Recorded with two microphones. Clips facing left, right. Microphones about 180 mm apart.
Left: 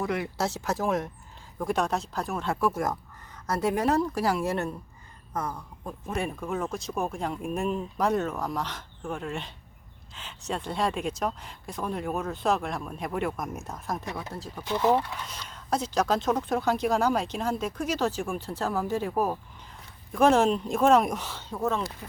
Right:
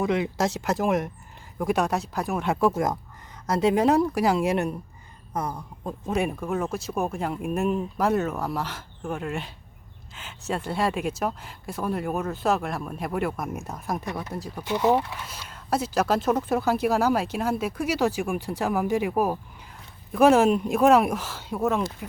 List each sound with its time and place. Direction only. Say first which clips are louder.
0.0 s speech: right 5 dB; 20° right (ahead or behind)